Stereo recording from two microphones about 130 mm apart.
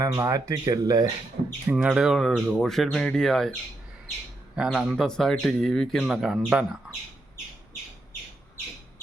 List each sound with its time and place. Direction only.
0.0 s speech: 25° right (ahead or behind)
1.6 s speech: 5° right (ahead or behind)
4.5 s speech: centre (ahead or behind)